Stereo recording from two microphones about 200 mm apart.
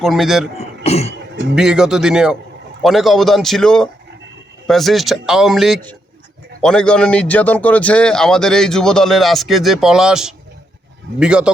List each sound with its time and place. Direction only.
0.0 s a man's voice: centre (ahead or behind)
0.9 s throat clearing: 30° left (ahead or behind)
1.5 s a man's voice: 5° right (ahead or behind)